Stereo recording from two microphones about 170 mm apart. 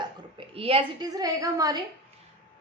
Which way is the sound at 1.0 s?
20° right (ahead or behind).